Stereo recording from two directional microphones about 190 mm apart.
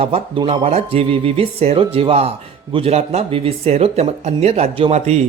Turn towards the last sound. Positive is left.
turn(degrees=-35)  # may be behind; listen again after turning